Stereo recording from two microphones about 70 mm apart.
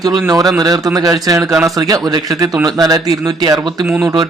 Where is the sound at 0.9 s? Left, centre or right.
Right.